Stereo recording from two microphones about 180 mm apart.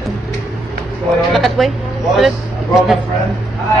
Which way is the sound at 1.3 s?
Centre (ahead or behind).